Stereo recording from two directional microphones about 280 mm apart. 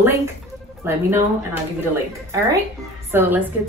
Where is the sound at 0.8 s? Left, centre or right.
Centre.